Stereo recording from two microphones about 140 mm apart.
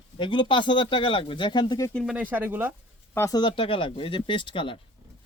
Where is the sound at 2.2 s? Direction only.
10° right (ahead or behind).